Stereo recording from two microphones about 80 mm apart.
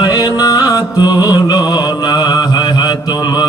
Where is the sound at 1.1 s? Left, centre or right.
Left.